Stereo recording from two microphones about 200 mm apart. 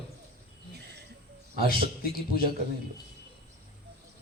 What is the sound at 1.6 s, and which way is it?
Speech, 50° right (ahead or behind).